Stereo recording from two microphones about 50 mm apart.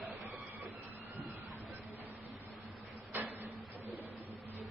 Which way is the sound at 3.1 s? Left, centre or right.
Right.